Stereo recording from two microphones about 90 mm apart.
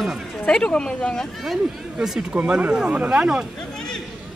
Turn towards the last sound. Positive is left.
turn(degrees=-10)  # may be behind; listen again after turning